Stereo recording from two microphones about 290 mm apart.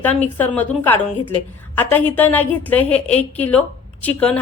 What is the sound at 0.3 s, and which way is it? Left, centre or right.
A woman's voice, centre.